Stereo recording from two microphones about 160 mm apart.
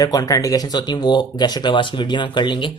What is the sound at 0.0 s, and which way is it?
Speech, 20° left (ahead or behind).